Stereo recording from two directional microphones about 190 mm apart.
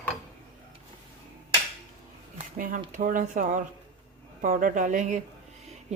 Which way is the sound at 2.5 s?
45° right (ahead or behind).